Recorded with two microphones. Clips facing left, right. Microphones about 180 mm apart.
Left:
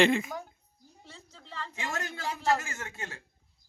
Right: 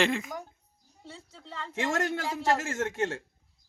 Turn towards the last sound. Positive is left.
turn(degrees=-90)